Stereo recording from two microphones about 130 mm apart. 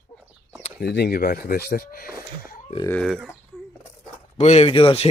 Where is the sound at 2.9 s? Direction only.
Centre (ahead or behind).